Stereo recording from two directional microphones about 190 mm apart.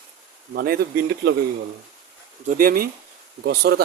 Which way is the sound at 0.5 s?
50° right (ahead or behind).